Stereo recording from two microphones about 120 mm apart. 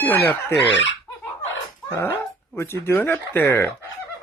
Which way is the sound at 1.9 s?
25° left (ahead or behind).